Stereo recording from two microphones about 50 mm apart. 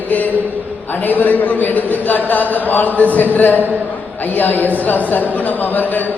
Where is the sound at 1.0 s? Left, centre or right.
Left.